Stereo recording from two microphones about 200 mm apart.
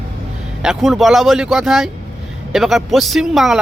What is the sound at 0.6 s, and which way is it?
Speech, centre (ahead or behind).